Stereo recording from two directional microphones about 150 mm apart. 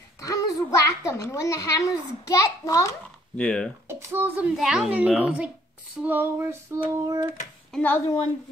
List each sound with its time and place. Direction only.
0.2 s a child's voice: 20° left (ahead or behind)
3.3 s a child's voice: 5° left (ahead or behind)
3.8 s female singing: 15° right (ahead or behind)
4.6 s a child's voice: 5° right (ahead or behind)
6.0 s female singing: 15° right (ahead or behind)
7.7 s speech: 10° left (ahead or behind)